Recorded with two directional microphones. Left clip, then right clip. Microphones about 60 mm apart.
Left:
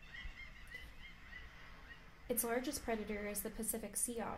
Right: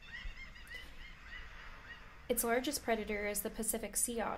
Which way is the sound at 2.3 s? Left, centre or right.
Centre.